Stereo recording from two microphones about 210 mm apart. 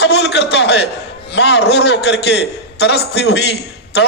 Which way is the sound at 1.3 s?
55° left (ahead or behind).